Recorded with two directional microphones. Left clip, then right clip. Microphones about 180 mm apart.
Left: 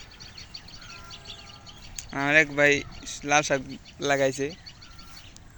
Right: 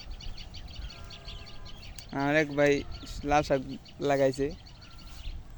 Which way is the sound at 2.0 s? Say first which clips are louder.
Left 6 dB; 15° right (ahead or behind).